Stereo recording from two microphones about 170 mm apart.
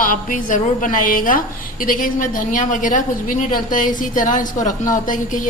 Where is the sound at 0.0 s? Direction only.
55° left (ahead or behind).